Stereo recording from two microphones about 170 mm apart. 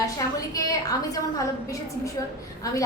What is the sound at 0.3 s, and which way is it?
A woman's voice, 20° left (ahead or behind).